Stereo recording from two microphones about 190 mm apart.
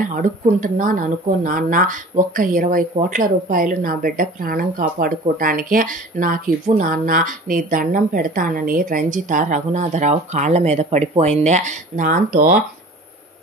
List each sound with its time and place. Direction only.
0.1 s speech: 45° right (ahead or behind)